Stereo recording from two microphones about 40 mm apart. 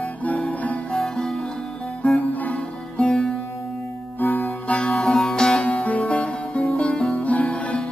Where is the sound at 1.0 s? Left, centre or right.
Centre.